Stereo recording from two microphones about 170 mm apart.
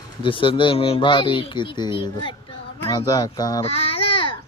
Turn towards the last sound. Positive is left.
turn(degrees=30)  # may be behind; listen again after turning